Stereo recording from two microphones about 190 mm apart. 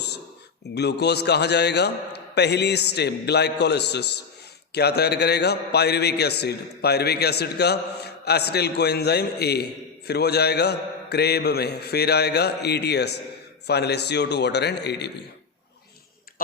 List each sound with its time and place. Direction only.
0.7 s a man's voice: 60° left (ahead or behind)